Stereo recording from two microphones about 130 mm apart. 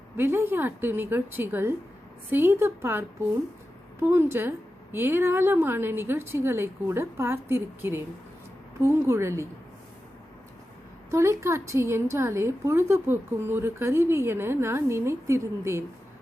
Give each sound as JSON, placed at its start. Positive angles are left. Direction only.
{"t": 0.2, "sound": "a woman's voice", "side_deg": -15}
{"t": 11.1, "sound": "a woman's voice", "side_deg": -20}